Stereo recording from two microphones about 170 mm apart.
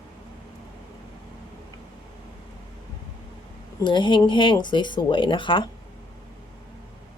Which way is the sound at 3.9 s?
30° left (ahead or behind).